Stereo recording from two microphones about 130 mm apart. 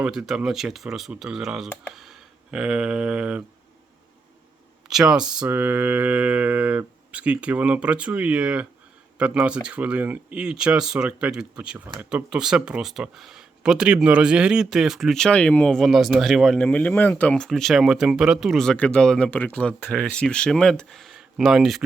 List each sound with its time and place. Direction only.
0.0 s speech: 5° right (ahead or behind)
4.9 s speech: 5° right (ahead or behind)
16.6 s speech: 10° left (ahead or behind)